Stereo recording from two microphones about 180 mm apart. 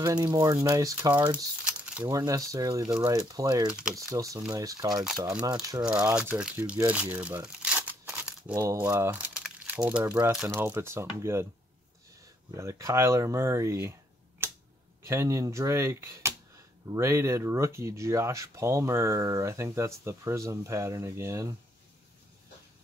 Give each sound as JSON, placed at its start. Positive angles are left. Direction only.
{"t": 0.0, "sound": "speech", "side_deg": -20}
{"t": 1.6, "sound": "crumpling", "side_deg": -5}
{"t": 2.0, "sound": "speech", "side_deg": -20}
{"t": 5.9, "sound": "speech", "side_deg": -5}
{"t": 12.4, "sound": "speech", "side_deg": -15}
{"t": 14.4, "sound": "finger snapping", "side_deg": -10}
{"t": 15.0, "sound": "speech", "side_deg": -15}